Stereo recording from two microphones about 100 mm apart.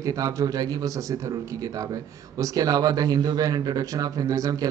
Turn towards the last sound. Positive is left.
turn(degrees=-35)  # may be behind; listen again after turning